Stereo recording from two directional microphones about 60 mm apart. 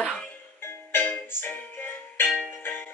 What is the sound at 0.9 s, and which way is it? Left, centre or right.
Music, left.